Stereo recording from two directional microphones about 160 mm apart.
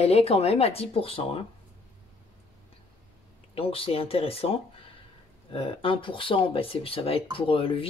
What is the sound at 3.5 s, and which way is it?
Speech, 35° left (ahead or behind).